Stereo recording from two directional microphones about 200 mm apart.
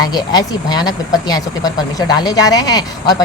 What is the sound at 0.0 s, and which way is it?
Speech, 20° left (ahead or behind).